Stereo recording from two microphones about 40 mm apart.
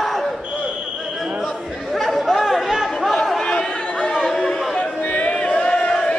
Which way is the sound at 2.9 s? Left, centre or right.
Centre.